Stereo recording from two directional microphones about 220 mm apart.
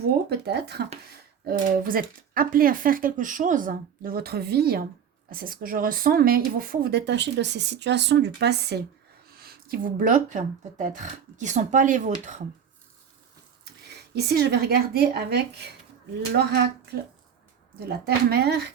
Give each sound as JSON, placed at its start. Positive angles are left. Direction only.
{"t": 0.3, "sound": "speech", "side_deg": -50}
{"t": 14.2, "sound": "speech", "side_deg": -45}